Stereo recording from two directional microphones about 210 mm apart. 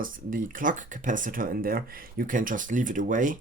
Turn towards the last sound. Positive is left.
turn(degrees=-40)  # may be behind; listen again after turning